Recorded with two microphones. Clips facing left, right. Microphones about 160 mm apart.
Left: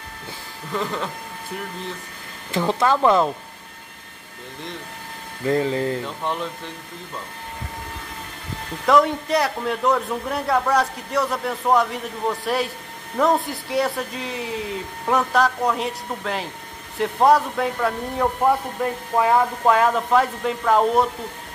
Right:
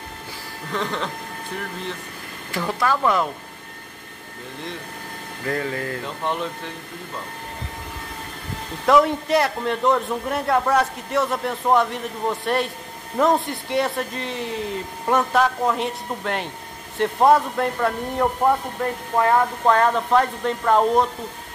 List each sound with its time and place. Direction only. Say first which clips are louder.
0.7 s a man's voice: even; 5° left (ahead or behind)
2.5 s speech: left 3 dB; 25° left (ahead or behind)
5.5 s speech: left 5 dB; 20° left (ahead or behind)
6.0 s a man's voice: right 1 dB; centre (ahead or behind)
8.8 s a man's voice: right 1 dB; centre (ahead or behind)